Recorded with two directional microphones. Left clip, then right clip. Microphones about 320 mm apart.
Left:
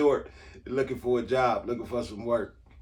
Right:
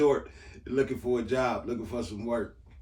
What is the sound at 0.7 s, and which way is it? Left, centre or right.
A man's voice, centre.